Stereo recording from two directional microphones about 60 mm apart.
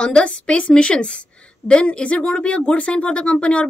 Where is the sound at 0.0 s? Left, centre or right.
Centre.